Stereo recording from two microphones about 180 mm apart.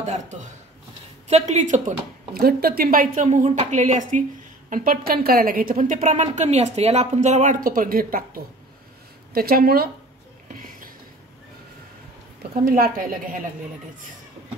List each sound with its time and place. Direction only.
0.0 s a woman's voice: 40° right (ahead or behind)
5.9 s speech: 40° right (ahead or behind)
9.3 s speech: 55° right (ahead or behind)
10.5 s a sound: 50° right (ahead or behind)
12.7 s a woman's voice: 55° right (ahead or behind)